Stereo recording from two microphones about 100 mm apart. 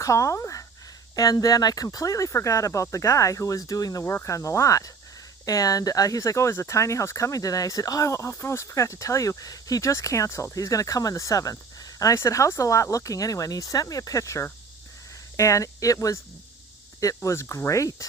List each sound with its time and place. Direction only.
0.0 s speech: 30° left (ahead or behind)
17.2 s speech: 30° left (ahead or behind)